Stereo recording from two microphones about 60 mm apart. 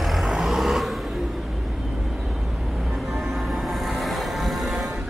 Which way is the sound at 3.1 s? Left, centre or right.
Centre.